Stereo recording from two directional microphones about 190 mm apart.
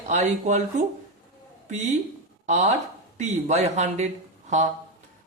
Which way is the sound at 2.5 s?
40° right (ahead or behind).